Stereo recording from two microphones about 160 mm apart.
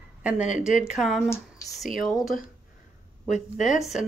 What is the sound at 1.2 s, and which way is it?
Speech, 20° left (ahead or behind).